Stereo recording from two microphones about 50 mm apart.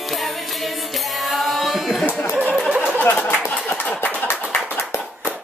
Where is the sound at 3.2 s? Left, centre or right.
Left.